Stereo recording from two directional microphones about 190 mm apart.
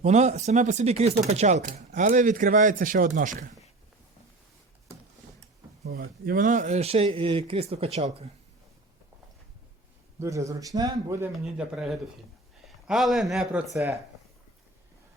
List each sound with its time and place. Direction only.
0.0 s speech: 35° right (ahead or behind)
5.8 s speech: 55° right (ahead or behind); by 8.3 s 35° right (ahead or behind)
10.2 s a man's voice: 15° right (ahead or behind)